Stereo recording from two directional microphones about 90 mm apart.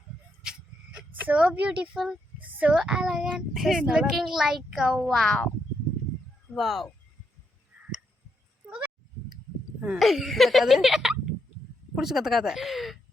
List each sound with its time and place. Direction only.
0.9 s speech: 15° right (ahead or behind)
5.0 s speech: 5° left (ahead or behind)
6.6 s speech: centre (ahead or behind)
10.0 s speech: centre (ahead or behind)